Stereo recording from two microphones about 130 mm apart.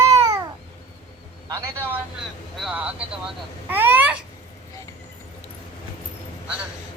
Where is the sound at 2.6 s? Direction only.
10° right (ahead or behind).